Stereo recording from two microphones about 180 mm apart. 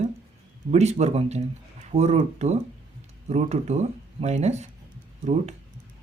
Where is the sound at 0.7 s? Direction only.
40° right (ahead or behind).